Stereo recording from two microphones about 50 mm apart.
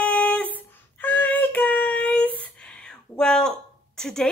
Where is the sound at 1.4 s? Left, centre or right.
Left.